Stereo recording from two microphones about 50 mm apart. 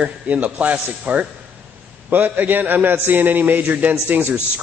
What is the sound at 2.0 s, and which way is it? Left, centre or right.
A man's voice, right.